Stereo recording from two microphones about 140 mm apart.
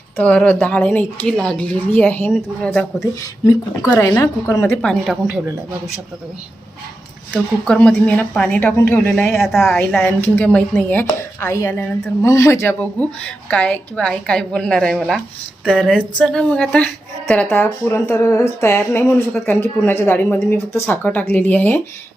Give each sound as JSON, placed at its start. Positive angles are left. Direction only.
{"t": 0.2, "sound": "a woman's voice", "side_deg": 10}
{"t": 2.3, "sound": "speech", "side_deg": 0}
{"t": 3.4, "sound": "speech", "side_deg": 20}
{"t": 4.8, "sound": "speech", "side_deg": 5}
{"t": 7.3, "sound": "a woman's voice", "side_deg": 5}
{"t": 9.6, "sound": "speech", "side_deg": 5}
{"t": 10.0, "sound": "a woman's voice", "side_deg": 15}